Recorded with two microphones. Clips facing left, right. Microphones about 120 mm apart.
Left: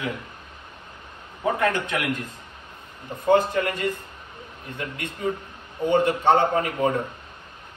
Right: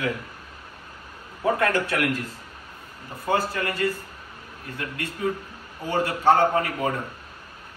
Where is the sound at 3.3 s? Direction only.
20° left (ahead or behind).